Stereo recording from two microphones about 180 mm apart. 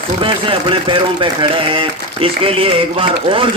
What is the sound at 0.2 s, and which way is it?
A man's voice, 30° right (ahead or behind).